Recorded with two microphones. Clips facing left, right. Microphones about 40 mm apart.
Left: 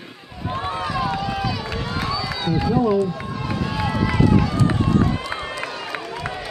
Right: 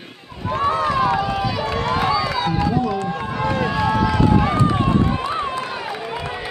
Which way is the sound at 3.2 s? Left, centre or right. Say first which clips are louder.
Right 5 dB; right.